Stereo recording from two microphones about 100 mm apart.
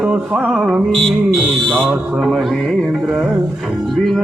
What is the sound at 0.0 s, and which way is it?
Music, 15° right (ahead or behind).